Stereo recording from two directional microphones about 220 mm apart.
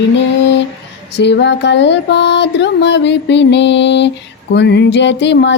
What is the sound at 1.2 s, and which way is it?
Music, 50° left (ahead or behind).